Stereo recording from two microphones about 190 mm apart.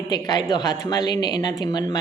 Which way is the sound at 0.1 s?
20° left (ahead or behind).